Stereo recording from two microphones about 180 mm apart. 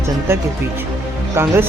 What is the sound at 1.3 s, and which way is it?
Speech, 15° right (ahead or behind).